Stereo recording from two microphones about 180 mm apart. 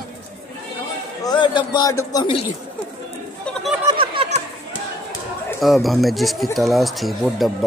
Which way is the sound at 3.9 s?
30° right (ahead or behind).